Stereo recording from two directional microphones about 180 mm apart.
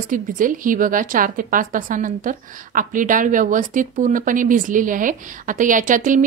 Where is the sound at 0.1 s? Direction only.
45° right (ahead or behind).